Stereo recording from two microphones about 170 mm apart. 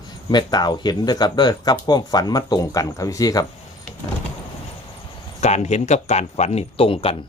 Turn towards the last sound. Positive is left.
turn(degrees=35)  # may be behind; listen again after turning